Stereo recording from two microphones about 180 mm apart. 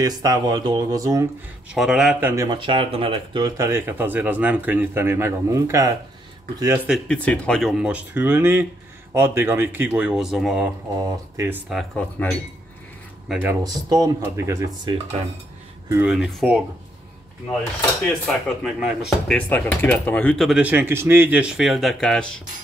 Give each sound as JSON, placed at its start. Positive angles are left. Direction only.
{"t": 0.0, "sound": "speech", "side_deg": -20}
{"t": 1.7, "sound": "speech", "side_deg": -5}
{"t": 6.9, "sound": "speech", "side_deg": 5}
{"t": 11.0, "sound": "speech", "side_deg": -20}
{"t": 11.7, "sound": "speech", "side_deg": 5}
{"t": 13.3, "sound": "speech", "side_deg": -10}
{"t": 13.7, "sound": "speech", "side_deg": -20}
{"t": 16.1, "sound": "speech", "side_deg": 0}
{"t": 18.6, "sound": "speech", "side_deg": 0}
{"t": 20.4, "sound": "speech", "side_deg": -5}